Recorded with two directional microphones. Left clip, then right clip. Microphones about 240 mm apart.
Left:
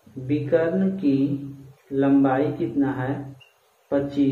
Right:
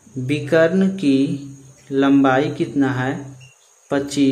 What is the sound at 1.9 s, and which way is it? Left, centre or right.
Speech, right.